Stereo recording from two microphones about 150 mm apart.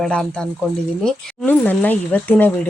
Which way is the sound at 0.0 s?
5° left (ahead or behind).